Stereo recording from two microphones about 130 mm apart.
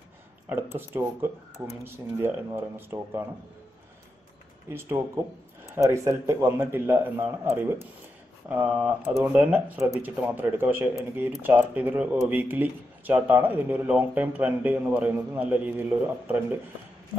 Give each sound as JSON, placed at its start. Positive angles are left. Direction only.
{"t": 0.5, "sound": "speech", "side_deg": -15}
{"t": 4.6, "sound": "speech", "side_deg": -20}